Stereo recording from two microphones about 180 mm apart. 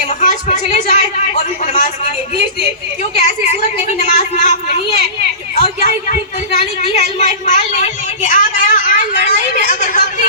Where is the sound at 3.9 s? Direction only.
40° left (ahead or behind).